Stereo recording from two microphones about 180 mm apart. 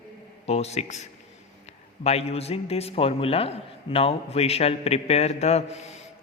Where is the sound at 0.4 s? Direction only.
35° left (ahead or behind).